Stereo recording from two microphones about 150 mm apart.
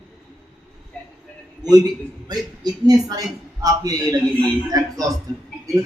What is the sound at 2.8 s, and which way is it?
A man's voice, 25° right (ahead or behind).